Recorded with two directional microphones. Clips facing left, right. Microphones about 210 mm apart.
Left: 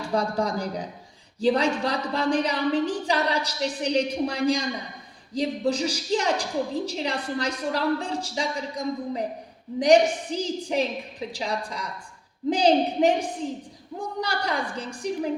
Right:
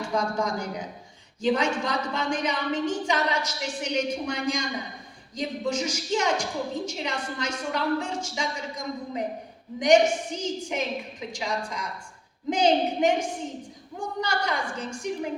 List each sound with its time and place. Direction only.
0.1 s a woman's voice: 35° left (ahead or behind)